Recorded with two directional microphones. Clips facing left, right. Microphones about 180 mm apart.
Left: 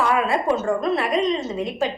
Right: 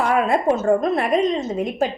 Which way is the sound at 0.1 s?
45° right (ahead or behind).